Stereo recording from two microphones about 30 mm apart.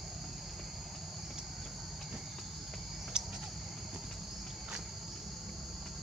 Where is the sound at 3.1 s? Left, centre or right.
Right.